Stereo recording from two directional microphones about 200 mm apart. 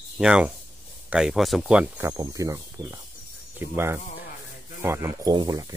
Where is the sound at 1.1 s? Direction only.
Centre (ahead or behind); by 5.8 s 20° right (ahead or behind).